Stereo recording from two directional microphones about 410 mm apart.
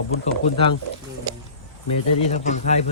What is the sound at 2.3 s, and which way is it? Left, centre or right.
Speech, centre.